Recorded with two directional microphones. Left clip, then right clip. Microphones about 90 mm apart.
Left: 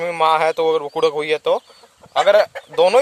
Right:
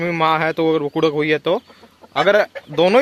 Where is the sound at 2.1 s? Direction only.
25° left (ahead or behind).